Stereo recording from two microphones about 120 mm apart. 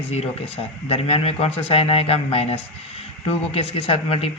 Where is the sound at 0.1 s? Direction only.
60° left (ahead or behind).